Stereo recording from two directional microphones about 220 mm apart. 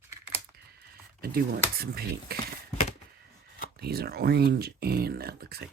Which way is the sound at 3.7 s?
45° right (ahead or behind).